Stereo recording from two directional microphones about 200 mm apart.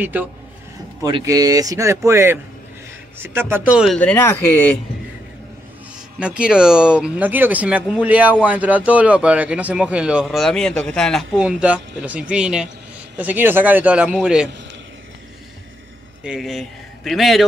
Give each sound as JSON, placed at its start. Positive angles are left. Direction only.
{"t": 0.0, "sound": "speech", "side_deg": -10}
{"t": 6.1, "sound": "speech", "side_deg": -5}
{"t": 16.3, "sound": "speech", "side_deg": 0}